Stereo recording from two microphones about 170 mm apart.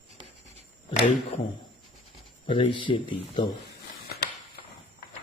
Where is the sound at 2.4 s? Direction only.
30° left (ahead or behind).